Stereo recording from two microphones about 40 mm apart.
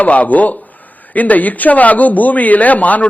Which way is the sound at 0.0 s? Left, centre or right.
Left.